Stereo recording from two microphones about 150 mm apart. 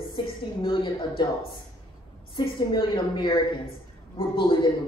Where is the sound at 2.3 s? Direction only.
30° left (ahead or behind).